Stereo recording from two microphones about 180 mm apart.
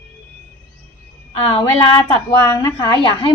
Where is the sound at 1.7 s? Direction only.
20° left (ahead or behind).